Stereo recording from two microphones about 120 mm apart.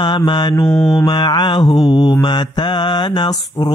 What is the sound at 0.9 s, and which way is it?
Mantra, 35° left (ahead or behind).